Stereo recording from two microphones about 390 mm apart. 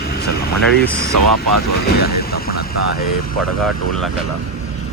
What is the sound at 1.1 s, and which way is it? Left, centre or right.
Speech, right.